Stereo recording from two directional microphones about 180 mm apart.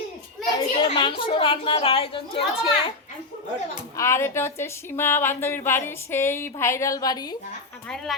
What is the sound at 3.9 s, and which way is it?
Speech, 15° left (ahead or behind).